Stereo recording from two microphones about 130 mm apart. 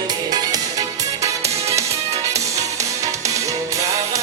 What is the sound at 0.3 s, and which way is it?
Music, 30° right (ahead or behind).